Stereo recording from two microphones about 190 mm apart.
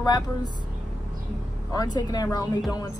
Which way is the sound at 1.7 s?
20° left (ahead or behind).